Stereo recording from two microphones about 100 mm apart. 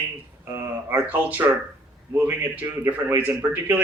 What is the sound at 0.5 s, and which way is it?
A man's voice, 20° right (ahead or behind).